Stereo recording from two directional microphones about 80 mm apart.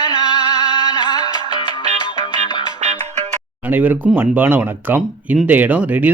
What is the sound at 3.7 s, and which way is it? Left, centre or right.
Speech, right.